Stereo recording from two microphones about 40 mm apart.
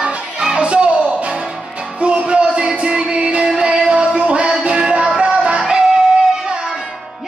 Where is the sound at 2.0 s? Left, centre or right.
Right.